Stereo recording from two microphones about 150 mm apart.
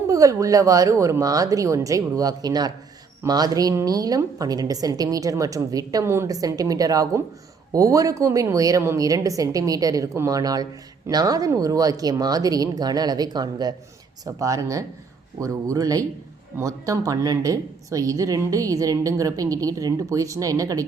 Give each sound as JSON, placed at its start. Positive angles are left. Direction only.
{"t": 0.1, "sound": "a woman's voice", "side_deg": -20}